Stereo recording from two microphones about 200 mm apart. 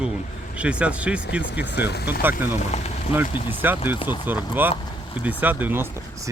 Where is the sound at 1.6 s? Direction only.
55° left (ahead or behind).